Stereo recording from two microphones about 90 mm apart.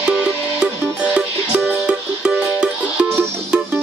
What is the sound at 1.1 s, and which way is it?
Music, 15° right (ahead or behind).